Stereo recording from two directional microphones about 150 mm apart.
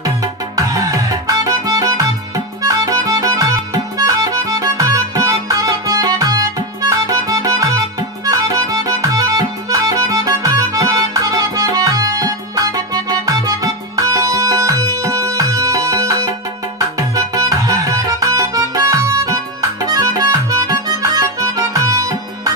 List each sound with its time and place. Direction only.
0.0 s music: 25° right (ahead or behind)